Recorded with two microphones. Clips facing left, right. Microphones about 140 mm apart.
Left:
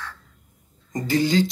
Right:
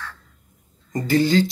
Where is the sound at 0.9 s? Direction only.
15° left (ahead or behind).